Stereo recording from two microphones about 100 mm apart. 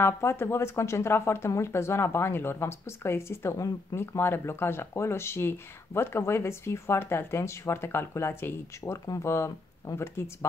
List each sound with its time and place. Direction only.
0.0 s speech: 25° left (ahead or behind)